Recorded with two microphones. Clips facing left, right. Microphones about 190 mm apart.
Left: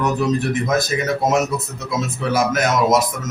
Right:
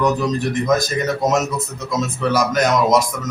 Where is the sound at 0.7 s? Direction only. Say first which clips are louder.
Right 3 dB; 5° left (ahead or behind).